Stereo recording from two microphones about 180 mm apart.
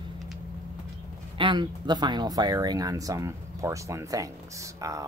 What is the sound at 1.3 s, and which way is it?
Speech, 25° right (ahead or behind).